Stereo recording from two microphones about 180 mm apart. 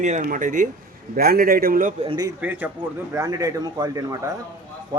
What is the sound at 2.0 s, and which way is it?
Speech, 25° right (ahead or behind).